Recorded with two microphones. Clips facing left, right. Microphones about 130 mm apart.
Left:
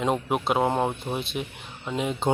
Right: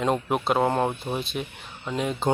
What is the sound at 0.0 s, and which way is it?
Speech, 5° left (ahead or behind).